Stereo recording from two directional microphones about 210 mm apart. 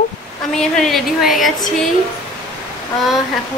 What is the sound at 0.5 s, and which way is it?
A woman's voice, centre (ahead or behind).